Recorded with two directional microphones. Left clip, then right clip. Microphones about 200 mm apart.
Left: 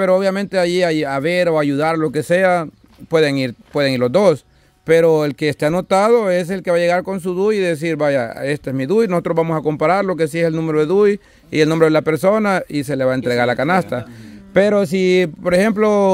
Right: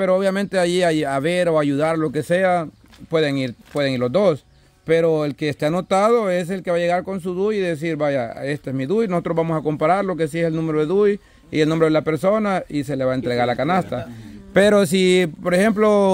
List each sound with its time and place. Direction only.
0.0 s speech: 20° left (ahead or behind)
14.5 s speech: 5° left (ahead or behind)